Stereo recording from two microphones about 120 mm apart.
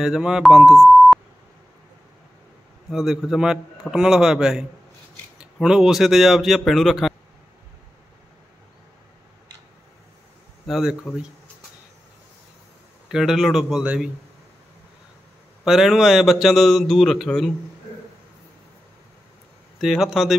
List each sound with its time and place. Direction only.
0.0 s a man's voice: 5° right (ahead or behind)
2.9 s a man's voice: centre (ahead or behind)
10.7 s a man's voice: 5° right (ahead or behind)
13.1 s a man's voice: 5° right (ahead or behind)
15.6 s a man's voice: 5° right (ahead or behind)
19.8 s a man's voice: centre (ahead or behind)